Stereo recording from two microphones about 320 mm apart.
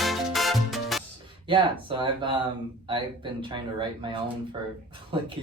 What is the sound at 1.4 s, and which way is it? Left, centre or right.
Speech, centre.